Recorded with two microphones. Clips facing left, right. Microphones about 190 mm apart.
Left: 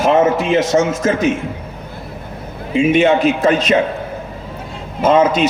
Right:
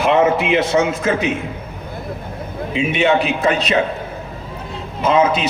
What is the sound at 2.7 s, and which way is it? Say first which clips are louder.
Speech: left 4 dB; 45° left (ahead or behind).